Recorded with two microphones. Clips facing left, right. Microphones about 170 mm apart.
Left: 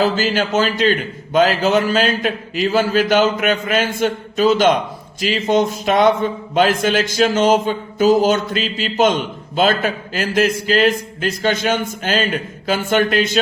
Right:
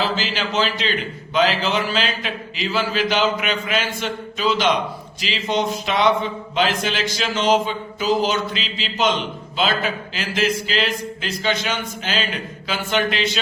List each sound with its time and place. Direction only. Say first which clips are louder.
0.0 s speech: left 6 dB; 45° left (ahead or behind)